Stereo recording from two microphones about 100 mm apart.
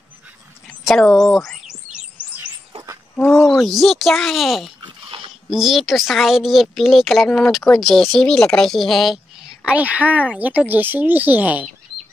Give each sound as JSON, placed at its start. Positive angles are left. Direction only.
{"t": 0.8, "sound": "a woman's voice", "side_deg": 5}
{"t": 3.6, "sound": "a woman's voice", "side_deg": 0}
{"t": 4.8, "sound": "dog", "side_deg": -55}
{"t": 5.5, "sound": "a woman's voice", "side_deg": -5}
{"t": 9.7, "sound": "speech", "side_deg": -15}